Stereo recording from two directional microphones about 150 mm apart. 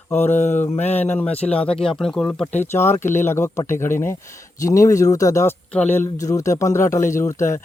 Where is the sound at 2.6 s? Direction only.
15° left (ahead or behind).